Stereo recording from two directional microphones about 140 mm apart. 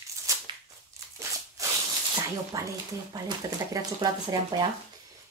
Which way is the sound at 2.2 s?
25° right (ahead or behind).